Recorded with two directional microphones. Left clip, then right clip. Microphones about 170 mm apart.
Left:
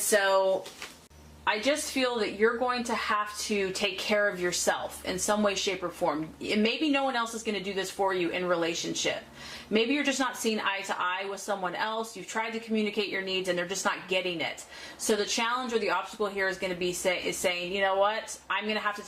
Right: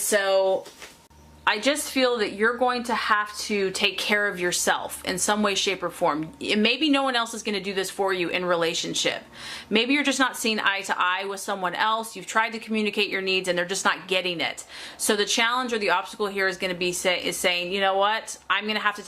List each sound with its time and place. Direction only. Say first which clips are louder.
0.1 s speech: right 3 dB; 25° right (ahead or behind)
2.0 s speech: right 6 dB; 35° right (ahead or behind)